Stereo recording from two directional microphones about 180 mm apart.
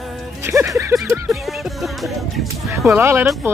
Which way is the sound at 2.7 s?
10° right (ahead or behind).